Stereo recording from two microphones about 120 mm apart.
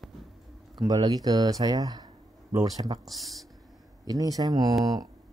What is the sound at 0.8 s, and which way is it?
Speech, 30° right (ahead or behind).